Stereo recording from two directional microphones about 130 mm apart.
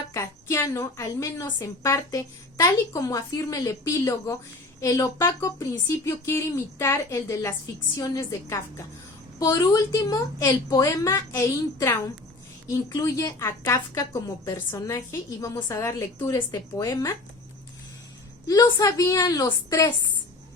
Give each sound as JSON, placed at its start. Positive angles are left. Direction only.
{"t": 0.1, "sound": "a woman's voice", "side_deg": 25}
{"t": 18.4, "sound": "a woman's voice", "side_deg": 30}